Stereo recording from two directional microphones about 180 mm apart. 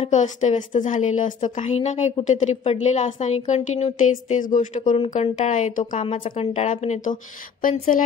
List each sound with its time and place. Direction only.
0.0 s a woman's voice: 40° left (ahead or behind)
6.0 s a woman's voice: 30° left (ahead or behind)